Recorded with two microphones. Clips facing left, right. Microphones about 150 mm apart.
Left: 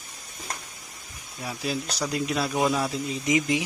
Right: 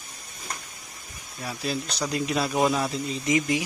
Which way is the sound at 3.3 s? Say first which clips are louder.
Even; 15° left (ahead or behind).